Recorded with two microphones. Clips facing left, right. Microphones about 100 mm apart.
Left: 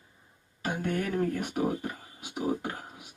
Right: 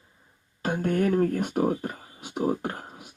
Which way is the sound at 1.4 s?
35° right (ahead or behind).